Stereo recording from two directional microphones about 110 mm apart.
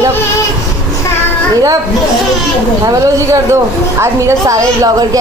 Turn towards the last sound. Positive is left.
turn(degrees=-30)  # may be behind; listen again after turning